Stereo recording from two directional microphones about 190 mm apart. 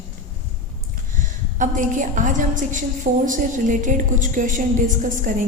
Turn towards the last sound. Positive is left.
turn(degrees=-45)  # may be behind; listen again after turning